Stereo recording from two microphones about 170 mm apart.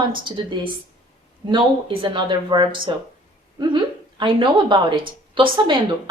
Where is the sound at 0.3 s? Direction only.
30° right (ahead or behind).